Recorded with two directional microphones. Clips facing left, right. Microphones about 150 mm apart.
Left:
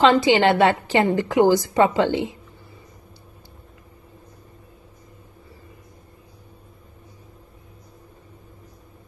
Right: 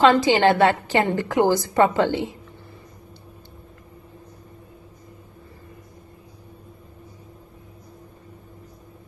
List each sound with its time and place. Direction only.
0.0 s a woman's voice: 20° left (ahead or behind)